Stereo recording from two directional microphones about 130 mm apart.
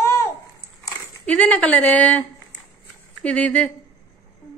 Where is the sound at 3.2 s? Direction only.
10° left (ahead or behind).